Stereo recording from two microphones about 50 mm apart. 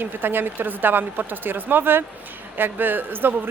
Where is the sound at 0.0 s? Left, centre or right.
Right.